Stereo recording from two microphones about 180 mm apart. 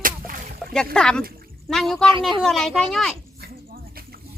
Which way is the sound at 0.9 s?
5° left (ahead or behind).